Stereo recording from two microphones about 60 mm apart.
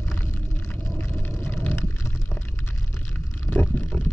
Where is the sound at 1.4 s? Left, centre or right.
Left.